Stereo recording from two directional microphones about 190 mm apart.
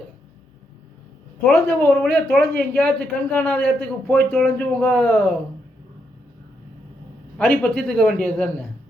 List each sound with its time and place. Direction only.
1.5 s speech: 10° left (ahead or behind)
7.3 s a man's voice: 10° left (ahead or behind)